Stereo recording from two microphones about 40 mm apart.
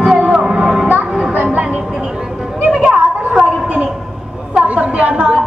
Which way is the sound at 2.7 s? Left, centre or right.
Centre.